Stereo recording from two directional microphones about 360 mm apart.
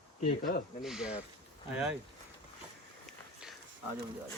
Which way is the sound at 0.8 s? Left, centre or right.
Centre.